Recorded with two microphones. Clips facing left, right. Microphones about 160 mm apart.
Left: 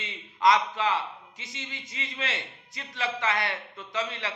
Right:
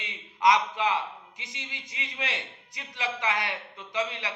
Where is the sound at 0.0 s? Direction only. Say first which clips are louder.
Even; 15° right (ahead or behind).